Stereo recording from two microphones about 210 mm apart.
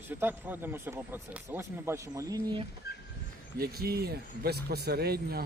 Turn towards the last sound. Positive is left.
turn(degrees=-45)  # may be behind; listen again after turning